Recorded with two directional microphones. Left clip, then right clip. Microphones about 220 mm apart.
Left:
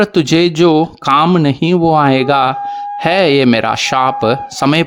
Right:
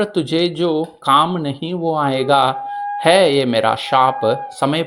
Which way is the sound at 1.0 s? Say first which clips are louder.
Even; 45° left (ahead or behind).